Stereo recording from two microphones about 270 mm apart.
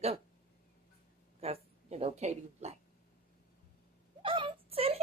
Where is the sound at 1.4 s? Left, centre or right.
Right.